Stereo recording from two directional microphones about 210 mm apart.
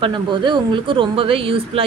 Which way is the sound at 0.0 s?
20° right (ahead or behind).